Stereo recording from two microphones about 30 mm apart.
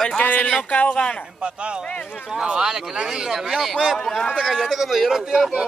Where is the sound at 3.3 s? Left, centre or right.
Centre.